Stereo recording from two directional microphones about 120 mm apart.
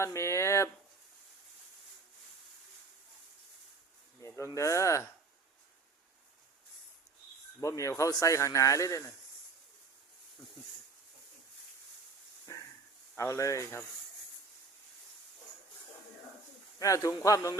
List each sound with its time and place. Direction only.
0.0 s speech: 25° left (ahead or behind)
4.2 s speech: 25° left (ahead or behind)
7.6 s speech: 25° left (ahead or behind)
12.5 s a sound: 30° left (ahead or behind)
13.1 s speech: 25° left (ahead or behind)
16.7 s speech: 30° left (ahead or behind)